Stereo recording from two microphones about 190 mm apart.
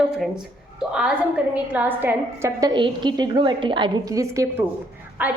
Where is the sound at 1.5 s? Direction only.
10° right (ahead or behind).